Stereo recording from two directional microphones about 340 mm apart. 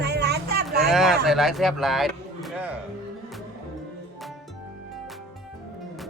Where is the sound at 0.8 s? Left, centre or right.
Centre.